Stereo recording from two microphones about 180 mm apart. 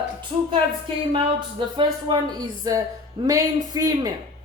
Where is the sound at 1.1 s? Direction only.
25° right (ahead or behind).